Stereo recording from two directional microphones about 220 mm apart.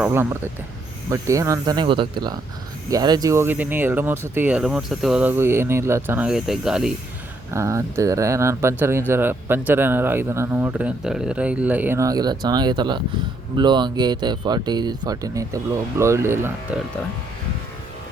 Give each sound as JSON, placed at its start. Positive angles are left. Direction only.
{"t": 0.0, "sound": "speech", "side_deg": -10}
{"t": 7.5, "sound": "speech", "side_deg": -15}